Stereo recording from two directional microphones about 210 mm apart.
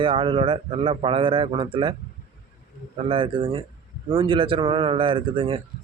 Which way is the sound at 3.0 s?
25° right (ahead or behind).